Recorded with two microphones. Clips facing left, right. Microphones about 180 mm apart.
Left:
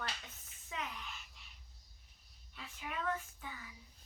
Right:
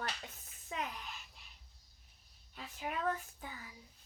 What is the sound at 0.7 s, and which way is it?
Speech, 40° right (ahead or behind).